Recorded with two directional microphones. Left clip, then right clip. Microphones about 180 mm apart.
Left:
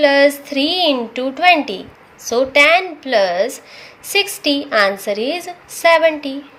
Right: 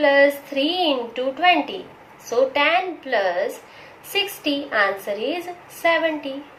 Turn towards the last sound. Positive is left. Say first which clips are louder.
# left 8 dB
turn(degrees=60)  # may be behind; listen again after turning